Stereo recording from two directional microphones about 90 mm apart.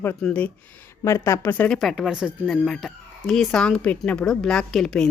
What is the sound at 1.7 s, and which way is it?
A woman's voice, 5° right (ahead or behind).